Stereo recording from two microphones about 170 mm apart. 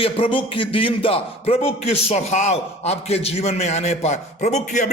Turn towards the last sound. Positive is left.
turn(degrees=45)  # may be behind; listen again after turning